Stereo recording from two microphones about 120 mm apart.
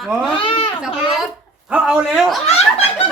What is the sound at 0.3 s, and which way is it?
Speech, 50° left (ahead or behind).